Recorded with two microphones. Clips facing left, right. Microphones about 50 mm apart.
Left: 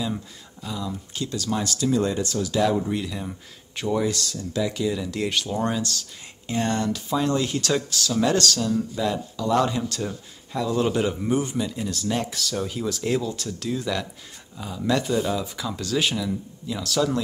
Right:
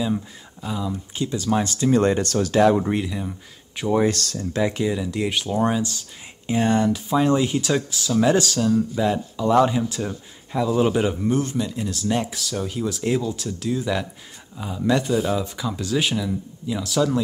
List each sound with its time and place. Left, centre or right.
0.0 s speech: centre; by 1.9 s right
1.9 s speech: right
3.1 s speech: centre
4.1 s speech: right
4.4 s speech: right
4.9 s speech: centre
11.2 s speech: centre
11.6 s speech: centre